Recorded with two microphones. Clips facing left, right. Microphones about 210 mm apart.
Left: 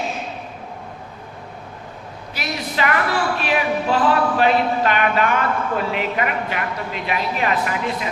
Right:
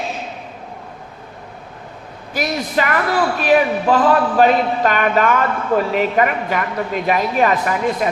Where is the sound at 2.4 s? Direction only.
50° right (ahead or behind).